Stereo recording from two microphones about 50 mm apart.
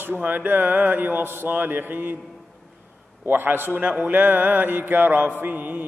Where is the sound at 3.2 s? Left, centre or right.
Right.